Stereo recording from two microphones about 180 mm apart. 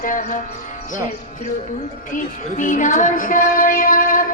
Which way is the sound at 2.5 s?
45° left (ahead or behind).